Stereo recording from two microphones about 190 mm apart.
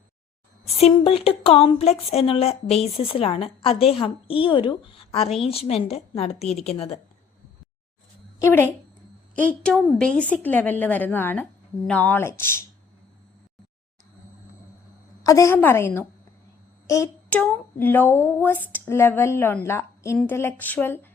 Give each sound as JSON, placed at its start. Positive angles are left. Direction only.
{"t": 0.8, "sound": "a woman's voice", "side_deg": 30}
{"t": 8.4, "sound": "a woman's voice", "side_deg": 10}
{"t": 15.2, "sound": "speech", "side_deg": 15}